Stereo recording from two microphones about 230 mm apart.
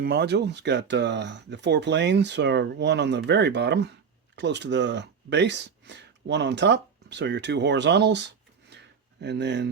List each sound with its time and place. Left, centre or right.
0.0 s speech: right